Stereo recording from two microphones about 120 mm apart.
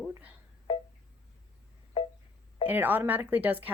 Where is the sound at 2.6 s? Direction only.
15° right (ahead or behind).